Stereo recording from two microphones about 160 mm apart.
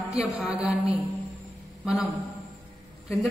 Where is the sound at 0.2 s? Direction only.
5° right (ahead or behind).